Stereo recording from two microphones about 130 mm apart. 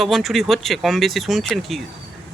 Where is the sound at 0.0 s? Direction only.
Centre (ahead or behind).